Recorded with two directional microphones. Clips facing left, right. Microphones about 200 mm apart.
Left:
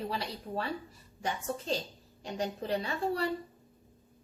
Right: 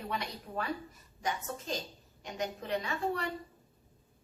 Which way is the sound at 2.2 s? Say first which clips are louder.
Left 3 dB; 35° left (ahead or behind).